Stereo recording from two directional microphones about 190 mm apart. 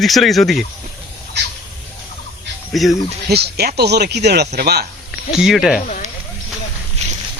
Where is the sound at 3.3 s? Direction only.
60° right (ahead or behind).